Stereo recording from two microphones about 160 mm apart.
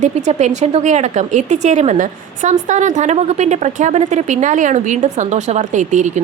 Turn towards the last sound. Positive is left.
turn(degrees=-50)  # may be behind; listen again after turning